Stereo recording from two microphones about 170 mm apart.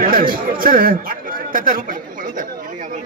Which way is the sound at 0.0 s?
55° right (ahead or behind).